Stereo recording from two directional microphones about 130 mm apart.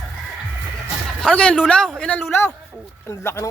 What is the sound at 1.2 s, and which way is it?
A man's voice, 10° left (ahead or behind).